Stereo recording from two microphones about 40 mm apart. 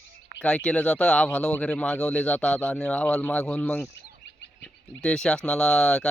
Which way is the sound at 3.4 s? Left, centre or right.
Left.